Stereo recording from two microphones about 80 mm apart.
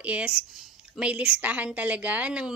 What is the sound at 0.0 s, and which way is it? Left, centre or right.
Speech, centre.